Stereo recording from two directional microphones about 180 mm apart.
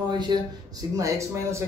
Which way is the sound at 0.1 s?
25° right (ahead or behind).